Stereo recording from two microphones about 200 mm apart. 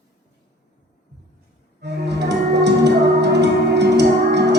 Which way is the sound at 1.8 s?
55° right (ahead or behind).